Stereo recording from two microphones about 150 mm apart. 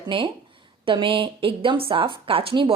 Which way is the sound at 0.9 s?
35° right (ahead or behind).